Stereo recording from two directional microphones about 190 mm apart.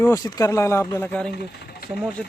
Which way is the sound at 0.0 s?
15° left (ahead or behind).